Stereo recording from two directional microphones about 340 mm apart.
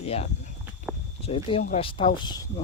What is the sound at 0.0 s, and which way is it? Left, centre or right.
Speech, centre.